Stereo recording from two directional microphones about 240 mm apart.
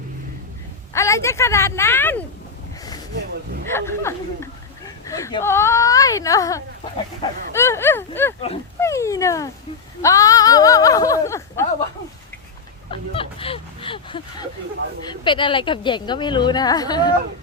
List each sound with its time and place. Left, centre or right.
0.9 s speech: centre
3.7 s speech: centre
12.9 s a woman's voice: left